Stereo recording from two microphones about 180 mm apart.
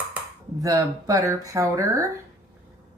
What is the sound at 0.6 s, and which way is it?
Speech, 20° right (ahead or behind).